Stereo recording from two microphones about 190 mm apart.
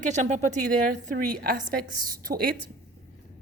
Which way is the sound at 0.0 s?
40° right (ahead or behind).